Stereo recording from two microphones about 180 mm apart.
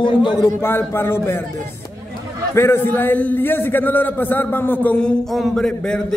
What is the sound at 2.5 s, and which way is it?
A man's voice, 15° left (ahead or behind).